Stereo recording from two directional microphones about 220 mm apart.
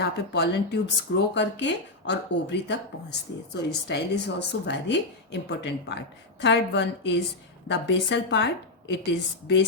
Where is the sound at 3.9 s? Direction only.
50° left (ahead or behind).